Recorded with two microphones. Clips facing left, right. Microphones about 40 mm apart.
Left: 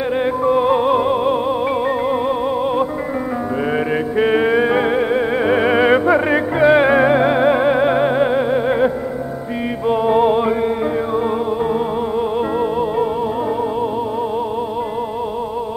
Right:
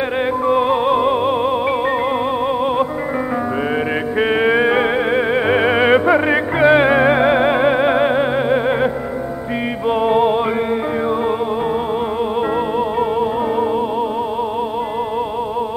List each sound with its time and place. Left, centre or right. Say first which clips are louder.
0.5 s music: left 1 dB; right
3.9 s music: left 3 dB; centre
12.4 s music: even; centre